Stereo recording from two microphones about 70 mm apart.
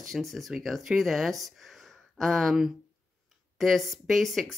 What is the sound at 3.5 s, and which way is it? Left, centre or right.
Speech, centre.